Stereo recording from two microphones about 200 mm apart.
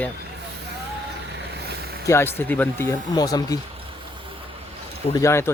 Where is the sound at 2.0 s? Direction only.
10° left (ahead or behind).